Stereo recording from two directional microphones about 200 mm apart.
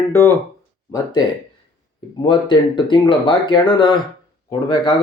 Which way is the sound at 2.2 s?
25° left (ahead or behind).